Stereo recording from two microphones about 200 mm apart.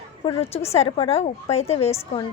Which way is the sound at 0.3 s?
30° left (ahead or behind).